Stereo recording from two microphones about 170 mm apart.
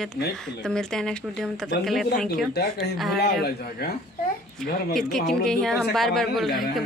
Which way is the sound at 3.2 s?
65° left (ahead or behind).